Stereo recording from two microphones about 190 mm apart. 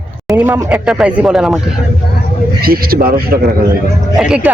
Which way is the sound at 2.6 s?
50° right (ahead or behind).